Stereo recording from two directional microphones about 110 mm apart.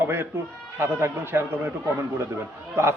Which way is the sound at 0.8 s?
20° right (ahead or behind).